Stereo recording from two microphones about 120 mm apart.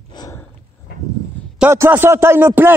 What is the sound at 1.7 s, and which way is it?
Speech, 20° right (ahead or behind).